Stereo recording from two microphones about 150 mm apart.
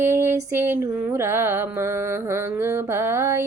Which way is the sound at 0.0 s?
15° right (ahead or behind).